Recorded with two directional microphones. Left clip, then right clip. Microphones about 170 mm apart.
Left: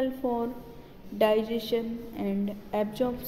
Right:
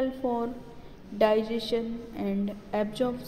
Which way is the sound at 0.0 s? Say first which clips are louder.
Even; centre (ahead or behind).